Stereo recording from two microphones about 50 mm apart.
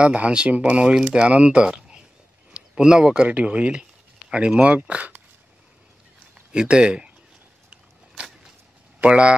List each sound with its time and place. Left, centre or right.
0.0 s speech: right
6.5 s speech: centre
9.0 s speech: right